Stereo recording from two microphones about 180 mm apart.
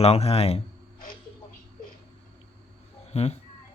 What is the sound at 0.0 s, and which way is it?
Speech, 35° left (ahead or behind).